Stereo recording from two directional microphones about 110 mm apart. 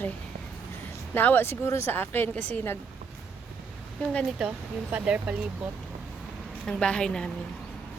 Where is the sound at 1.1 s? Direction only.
15° left (ahead or behind).